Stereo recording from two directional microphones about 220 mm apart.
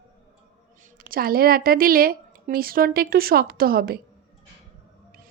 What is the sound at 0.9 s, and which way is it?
A woman's voice, 40° right (ahead or behind).